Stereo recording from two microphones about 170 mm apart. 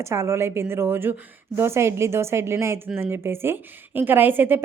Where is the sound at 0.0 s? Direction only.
15° right (ahead or behind).